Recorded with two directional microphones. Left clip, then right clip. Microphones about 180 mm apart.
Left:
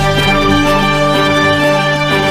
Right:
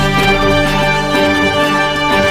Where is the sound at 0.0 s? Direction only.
Centre (ahead or behind).